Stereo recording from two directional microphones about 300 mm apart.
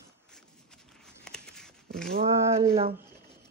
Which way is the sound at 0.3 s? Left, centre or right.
Centre.